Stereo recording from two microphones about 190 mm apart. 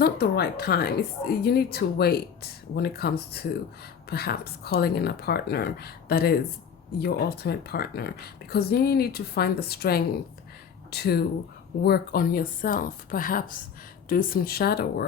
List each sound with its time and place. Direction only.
0.0 s a woman's voice: 55° left (ahead or behind)